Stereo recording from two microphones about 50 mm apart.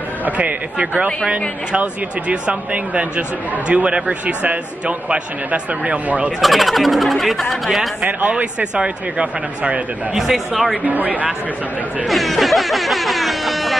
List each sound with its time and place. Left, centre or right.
0.2 s speech: right
6.4 s speech: centre
8.0 s speech: right
10.1 s speech: centre
10.9 s speech: right
12.1 s music: centre